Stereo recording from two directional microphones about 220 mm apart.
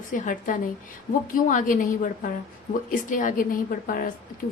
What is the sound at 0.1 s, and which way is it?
A woman's voice, 35° left (ahead or behind).